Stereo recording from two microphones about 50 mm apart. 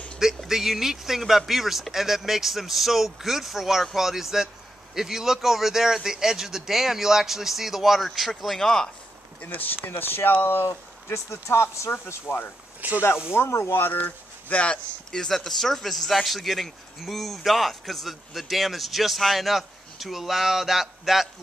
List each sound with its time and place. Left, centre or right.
0.5 s a man's voice: centre
9.4 s speech: left
9.8 s speech: left
12.3 s speech: left
12.8 s speech: right
13.3 s speech: left
13.7 s speech: left
15.0 s a man's voice: centre